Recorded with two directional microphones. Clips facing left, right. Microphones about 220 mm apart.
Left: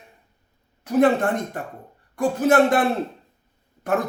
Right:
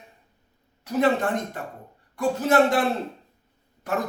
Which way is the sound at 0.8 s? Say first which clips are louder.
Left 4 dB; 50° left (ahead or behind).